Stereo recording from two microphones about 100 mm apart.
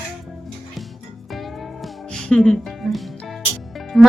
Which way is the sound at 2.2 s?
10° left (ahead or behind).